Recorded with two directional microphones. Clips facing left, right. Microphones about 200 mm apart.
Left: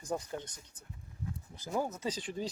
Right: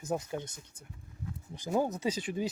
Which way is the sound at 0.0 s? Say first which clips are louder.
Right 3 dB; 10° right (ahead or behind).